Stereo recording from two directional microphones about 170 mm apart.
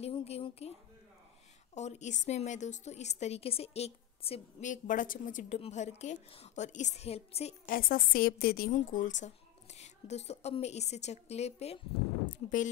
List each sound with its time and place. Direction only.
0.0 s speech: 35° left (ahead or behind)
1.8 s a woman's voice: 40° left (ahead or behind)
7.6 s a woman's voice: 55° left (ahead or behind); by 11.8 s 40° left (ahead or behind)
12.3 s speech: 50° left (ahead or behind)